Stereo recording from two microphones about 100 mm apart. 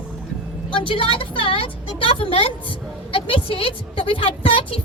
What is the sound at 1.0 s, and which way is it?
A woman's voice, 60° left (ahead or behind).